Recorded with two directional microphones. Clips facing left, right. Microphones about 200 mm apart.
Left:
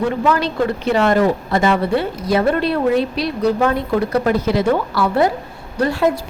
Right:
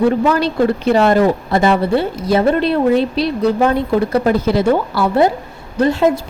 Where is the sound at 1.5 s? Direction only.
30° right (ahead or behind).